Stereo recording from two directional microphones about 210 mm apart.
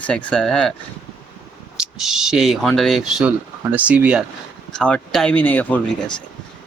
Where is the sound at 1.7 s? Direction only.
Centre (ahead or behind).